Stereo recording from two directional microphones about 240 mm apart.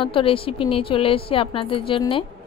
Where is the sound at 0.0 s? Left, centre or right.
Left.